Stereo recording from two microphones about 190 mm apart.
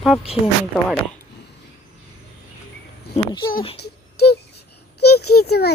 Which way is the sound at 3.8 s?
60° left (ahead or behind).